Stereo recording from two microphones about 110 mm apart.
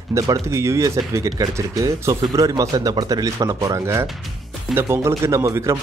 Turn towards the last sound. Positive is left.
turn(degrees=-30)  # may be behind; listen again after turning